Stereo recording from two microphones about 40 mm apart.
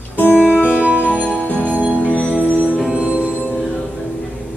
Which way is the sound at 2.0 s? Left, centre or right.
Left.